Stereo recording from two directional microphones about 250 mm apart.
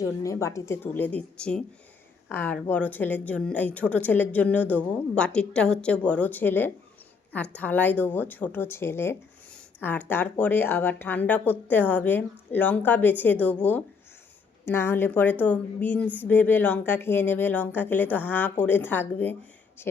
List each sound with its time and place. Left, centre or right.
0.0 s speech: centre